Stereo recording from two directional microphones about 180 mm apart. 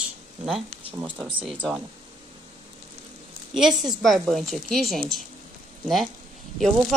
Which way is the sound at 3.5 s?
Centre (ahead or behind).